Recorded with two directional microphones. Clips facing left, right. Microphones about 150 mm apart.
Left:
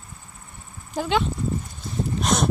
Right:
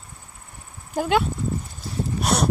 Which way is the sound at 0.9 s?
10° right (ahead or behind).